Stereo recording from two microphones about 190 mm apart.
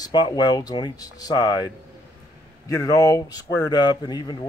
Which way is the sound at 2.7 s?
15° left (ahead or behind).